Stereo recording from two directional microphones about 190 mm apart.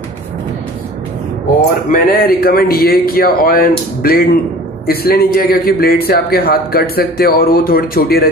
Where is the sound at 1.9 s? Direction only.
50° left (ahead or behind).